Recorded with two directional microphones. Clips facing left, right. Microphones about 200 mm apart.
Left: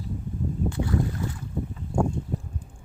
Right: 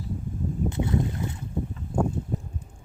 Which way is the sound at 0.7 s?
20° right (ahead or behind).